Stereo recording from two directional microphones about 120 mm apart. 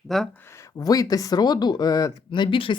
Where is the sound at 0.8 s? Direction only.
30° left (ahead or behind).